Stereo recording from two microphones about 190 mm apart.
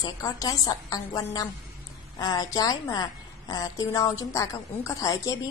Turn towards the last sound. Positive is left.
turn(degrees=15)  # may be behind; listen again after turning